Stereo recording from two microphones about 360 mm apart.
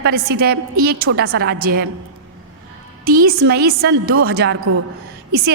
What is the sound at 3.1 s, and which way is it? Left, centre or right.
A woman's voice, right.